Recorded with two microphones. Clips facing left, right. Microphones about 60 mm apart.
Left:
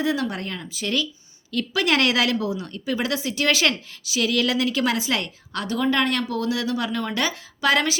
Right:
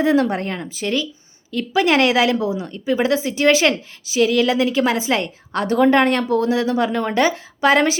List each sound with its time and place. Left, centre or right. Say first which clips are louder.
0.0 s a woman's voice: right 7 dB; right
5.6 s speech: right 7 dB; right